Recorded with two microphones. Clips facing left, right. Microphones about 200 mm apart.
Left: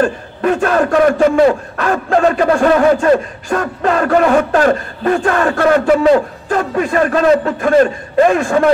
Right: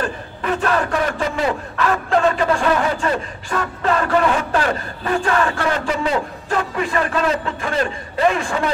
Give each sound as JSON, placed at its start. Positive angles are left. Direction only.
{"t": 0.0, "sound": "a man's voice", "side_deg": 45}